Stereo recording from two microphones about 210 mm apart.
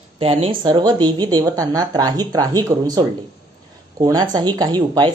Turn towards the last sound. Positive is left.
turn(degrees=-20)  # may be behind; listen again after turning